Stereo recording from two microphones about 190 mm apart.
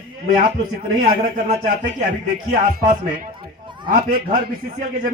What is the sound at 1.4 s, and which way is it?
A man's voice, 40° right (ahead or behind).